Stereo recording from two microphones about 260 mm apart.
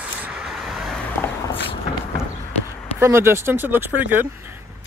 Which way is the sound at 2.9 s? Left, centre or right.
Centre.